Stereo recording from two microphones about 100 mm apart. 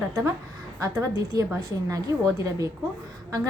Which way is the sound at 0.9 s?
35° right (ahead or behind).